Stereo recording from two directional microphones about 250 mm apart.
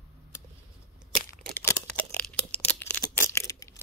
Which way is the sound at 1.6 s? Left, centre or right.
Centre.